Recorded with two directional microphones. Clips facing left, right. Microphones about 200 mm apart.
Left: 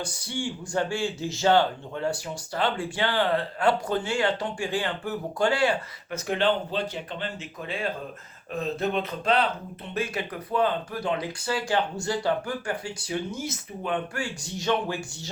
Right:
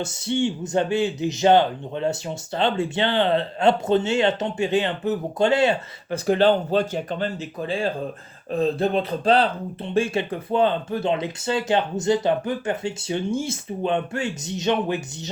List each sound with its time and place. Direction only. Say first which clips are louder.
0.0 s speech: right 8 dB; 25° right (ahead or behind)
6.2 s speech: right 7 dB; 35° right (ahead or behind); by 15.0 s 20° right (ahead or behind)